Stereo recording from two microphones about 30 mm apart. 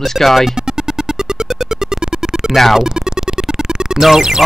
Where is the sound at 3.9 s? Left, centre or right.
Centre.